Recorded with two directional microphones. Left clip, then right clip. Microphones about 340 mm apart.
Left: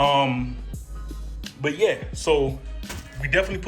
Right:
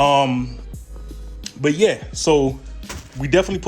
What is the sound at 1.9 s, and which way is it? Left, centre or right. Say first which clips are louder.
Speech: right 4 dB; centre.